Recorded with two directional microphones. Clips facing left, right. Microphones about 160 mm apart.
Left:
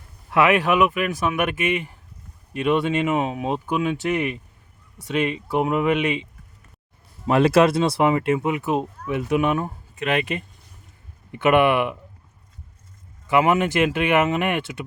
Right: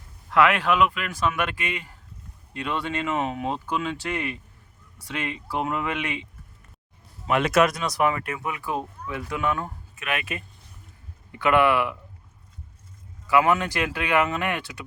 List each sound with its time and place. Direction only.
0.3 s speech: 20° left (ahead or behind)
7.3 s speech: 35° left (ahead or behind)
9.9 s speech: 35° left (ahead or behind)
11.3 s speech: 20° left (ahead or behind)
13.2 s speech: 20° left (ahead or behind)